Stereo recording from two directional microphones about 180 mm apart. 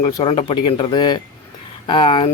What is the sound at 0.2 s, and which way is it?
Speech, 25° left (ahead or behind).